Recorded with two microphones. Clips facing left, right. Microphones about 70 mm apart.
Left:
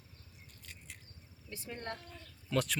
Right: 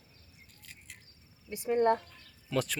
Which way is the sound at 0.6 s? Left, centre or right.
Centre.